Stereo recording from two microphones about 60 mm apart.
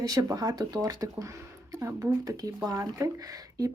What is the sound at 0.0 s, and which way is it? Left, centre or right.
Speech, right.